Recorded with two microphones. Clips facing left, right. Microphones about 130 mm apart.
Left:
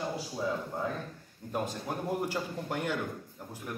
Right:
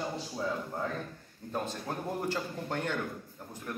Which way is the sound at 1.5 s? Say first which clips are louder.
Left 1 dB; 10° left (ahead or behind).